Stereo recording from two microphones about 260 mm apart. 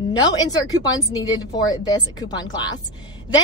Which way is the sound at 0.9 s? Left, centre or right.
Centre.